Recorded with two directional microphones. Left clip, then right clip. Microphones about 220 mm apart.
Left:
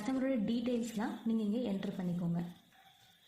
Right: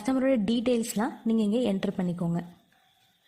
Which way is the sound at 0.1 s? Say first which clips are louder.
Right 10 dB; 45° right (ahead or behind).